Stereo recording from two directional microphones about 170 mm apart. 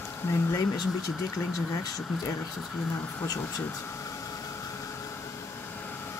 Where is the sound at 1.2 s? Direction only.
20° left (ahead or behind).